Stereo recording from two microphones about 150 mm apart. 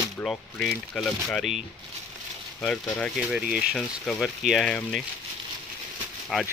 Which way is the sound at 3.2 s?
5° right (ahead or behind).